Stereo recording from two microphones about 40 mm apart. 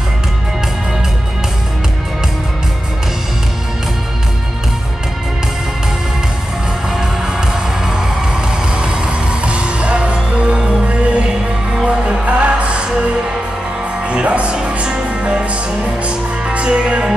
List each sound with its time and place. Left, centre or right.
6.9 s music: centre
14.0 s music: right